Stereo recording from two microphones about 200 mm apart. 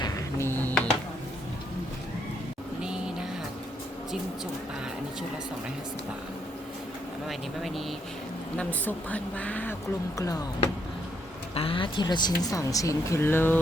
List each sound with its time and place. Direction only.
0.0 s music: 15° left (ahead or behind)
2.8 s vehicle: 5° right (ahead or behind)
7.3 s speech: centre (ahead or behind); by 10.4 s 20° left (ahead or behind)
11.5 s speech: 25° left (ahead or behind); by 13.6 s 10° left (ahead or behind)